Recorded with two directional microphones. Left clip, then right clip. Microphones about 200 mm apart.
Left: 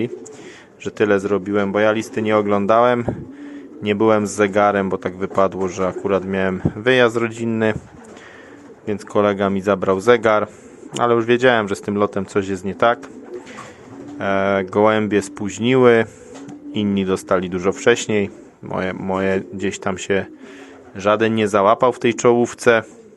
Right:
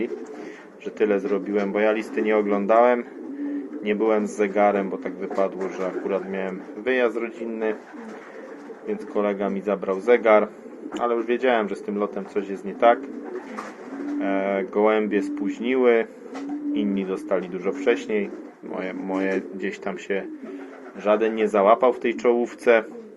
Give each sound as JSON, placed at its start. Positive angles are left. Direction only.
{"t": 0.9, "sound": "a man's voice", "side_deg": 45}
{"t": 8.9, "sound": "a man's voice", "side_deg": 50}
{"t": 14.2, "sound": "a man's voice", "side_deg": 45}